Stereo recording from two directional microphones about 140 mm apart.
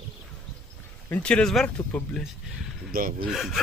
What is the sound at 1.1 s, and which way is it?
Speech, 10° left (ahead or behind).